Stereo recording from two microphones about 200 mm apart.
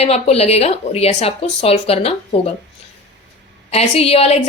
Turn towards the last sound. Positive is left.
turn(degrees=30)  # may be behind; listen again after turning